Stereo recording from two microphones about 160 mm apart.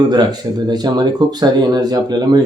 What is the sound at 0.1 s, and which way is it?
Speech, 25° right (ahead or behind).